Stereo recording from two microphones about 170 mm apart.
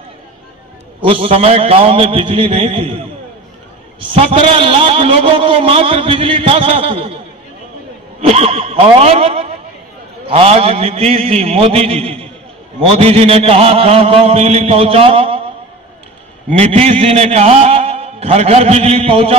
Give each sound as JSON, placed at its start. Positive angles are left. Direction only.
{"t": 1.0, "sound": "a man's voice", "side_deg": -35}
{"t": 4.2, "sound": "a man's voice", "side_deg": -35}
{"t": 8.3, "sound": "a man's voice", "side_deg": -40}
{"t": 16.5, "sound": "a man's voice", "side_deg": -35}